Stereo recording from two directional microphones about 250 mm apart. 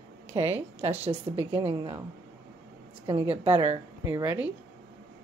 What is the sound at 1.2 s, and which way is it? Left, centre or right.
Speech, right.